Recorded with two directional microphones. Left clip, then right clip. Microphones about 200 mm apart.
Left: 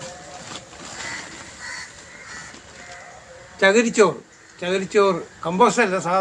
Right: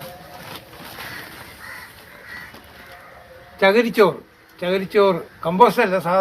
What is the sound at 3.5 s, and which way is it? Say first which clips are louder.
A man's voice: right 1 dB; 20° right (ahead or behind).